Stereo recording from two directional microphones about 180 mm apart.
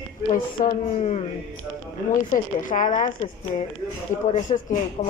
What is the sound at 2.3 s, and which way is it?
Speech, 45° left (ahead or behind).